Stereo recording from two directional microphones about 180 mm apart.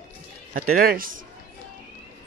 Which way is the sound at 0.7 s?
55° right (ahead or behind).